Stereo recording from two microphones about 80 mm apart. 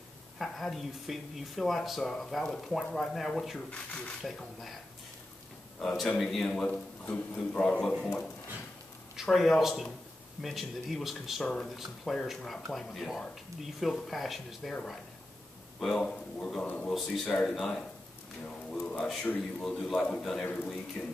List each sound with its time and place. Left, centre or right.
0.4 s speech: centre
4.2 s speech: centre
5.8 s speech: centre
7.1 s a man's voice: left; by 11.4 s centre
11.4 s speech: centre
11.7 s speech: centre
15.9 s speech: centre
16.9 s speech: centre
18.4 s a sound: centre
19.6 s speech: centre
20.4 s speech: centre